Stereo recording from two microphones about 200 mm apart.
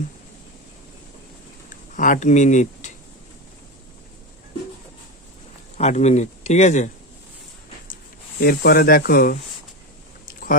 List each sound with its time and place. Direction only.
2.0 s speech: 40° left (ahead or behind)
5.7 s speech: 35° left (ahead or behind)
8.4 s speech: 50° left (ahead or behind)
10.2 s a sound: 45° left (ahead or behind)